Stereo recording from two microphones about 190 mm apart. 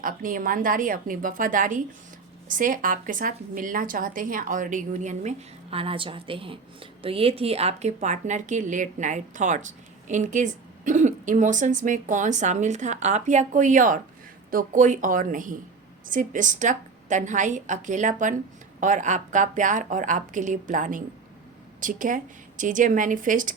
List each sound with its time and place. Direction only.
0.0 s a woman's voice: 45° right (ahead or behind)
5.7 s a woman's voice: 30° right (ahead or behind); by 23.6 s 45° right (ahead or behind)